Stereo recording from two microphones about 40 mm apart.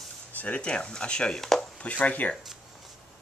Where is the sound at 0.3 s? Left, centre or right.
Left.